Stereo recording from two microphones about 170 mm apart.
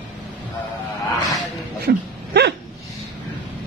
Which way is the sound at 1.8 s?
75° right (ahead or behind).